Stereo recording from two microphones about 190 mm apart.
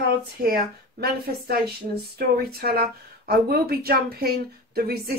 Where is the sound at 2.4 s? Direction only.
55° right (ahead or behind).